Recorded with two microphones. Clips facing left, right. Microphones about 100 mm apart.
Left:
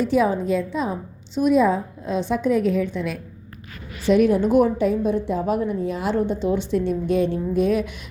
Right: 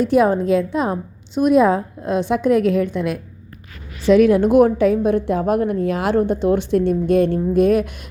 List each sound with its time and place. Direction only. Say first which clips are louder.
0.0 s a woman's voice: right 4 dB; 55° right (ahead or behind)
4.0 s a woman's voice: right 4 dB; 90° right; by 6.1 s 75° right (ahead or behind)
6.1 s a woman's voice: right 5 dB; 55° right (ahead or behind)